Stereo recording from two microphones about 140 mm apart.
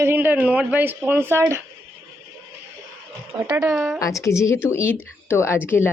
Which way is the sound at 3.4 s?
20° right (ahead or behind).